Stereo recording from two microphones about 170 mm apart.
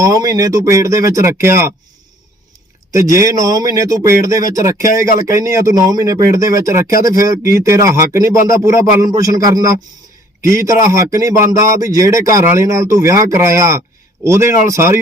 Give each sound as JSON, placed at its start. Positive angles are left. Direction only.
{"t": 0.0, "sound": "speech", "side_deg": -20}
{"t": 2.9, "sound": "speech", "side_deg": -15}